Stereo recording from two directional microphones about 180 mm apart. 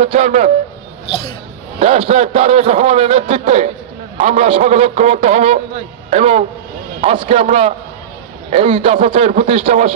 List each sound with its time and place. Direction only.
0.0 s a man's voice: 35° right (ahead or behind)
1.8 s a man's voice: 35° right (ahead or behind)